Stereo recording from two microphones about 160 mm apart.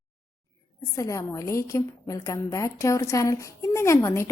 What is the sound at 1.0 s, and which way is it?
A woman's voice, 20° left (ahead or behind).